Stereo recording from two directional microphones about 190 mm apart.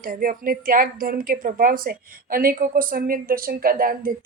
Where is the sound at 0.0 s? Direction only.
45° right (ahead or behind).